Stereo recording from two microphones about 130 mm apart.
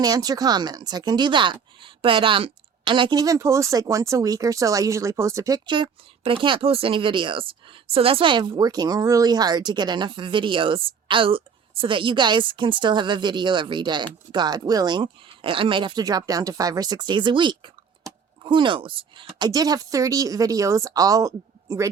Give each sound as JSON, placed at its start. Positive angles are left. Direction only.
{"t": 0.0, "sound": "speech", "side_deg": -30}